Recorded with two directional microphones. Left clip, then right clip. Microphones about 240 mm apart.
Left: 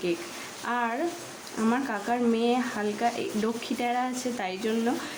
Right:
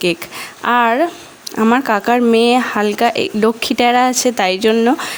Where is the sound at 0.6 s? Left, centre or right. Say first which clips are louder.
Right 16 dB; right.